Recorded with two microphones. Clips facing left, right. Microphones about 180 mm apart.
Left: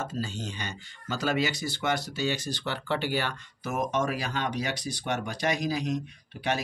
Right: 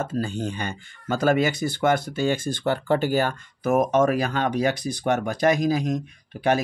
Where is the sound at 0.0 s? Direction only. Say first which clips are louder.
Right 7 dB; 55° right (ahead or behind).